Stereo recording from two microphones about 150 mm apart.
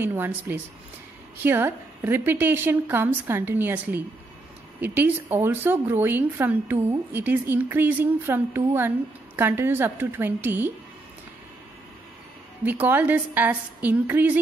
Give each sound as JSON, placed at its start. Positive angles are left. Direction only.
{"t": 0.0, "sound": "a woman's voice", "side_deg": -15}
{"t": 12.6, "sound": "a woman's voice", "side_deg": -10}